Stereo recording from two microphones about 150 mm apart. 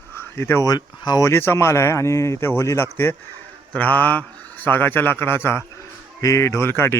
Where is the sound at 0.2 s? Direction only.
15° left (ahead or behind).